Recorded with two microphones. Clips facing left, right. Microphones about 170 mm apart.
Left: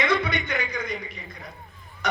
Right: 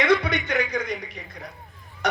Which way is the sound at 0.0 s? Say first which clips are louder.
Right 3 dB; 70° right (ahead or behind).